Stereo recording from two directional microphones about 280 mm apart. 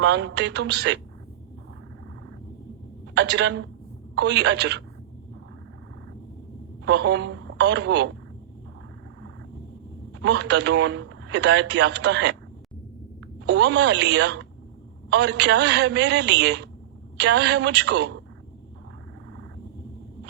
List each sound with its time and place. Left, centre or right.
0.0 s a man's voice: right
3.2 s a man's voice: right
6.8 s a man's voice: right
10.2 s a man's voice: right
13.4 s a man's voice: right